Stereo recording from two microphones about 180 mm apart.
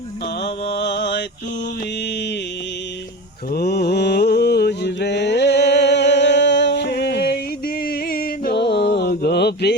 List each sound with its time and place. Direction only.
0.4 s mantra: 70° left (ahead or behind)
3.5 s mantra: 60° left (ahead or behind)
7.9 s a sound: 55° left (ahead or behind)